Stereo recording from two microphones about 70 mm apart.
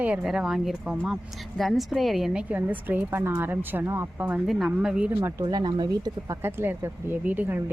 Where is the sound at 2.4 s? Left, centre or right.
Right.